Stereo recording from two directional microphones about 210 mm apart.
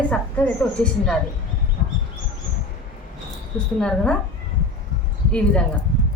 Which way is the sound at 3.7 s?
5° left (ahead or behind).